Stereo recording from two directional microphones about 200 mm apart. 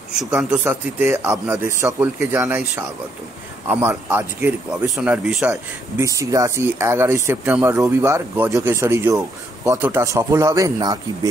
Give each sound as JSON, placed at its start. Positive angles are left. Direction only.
{"t": 0.4, "sound": "speech", "side_deg": -5}
{"t": 5.5, "sound": "speech", "side_deg": -15}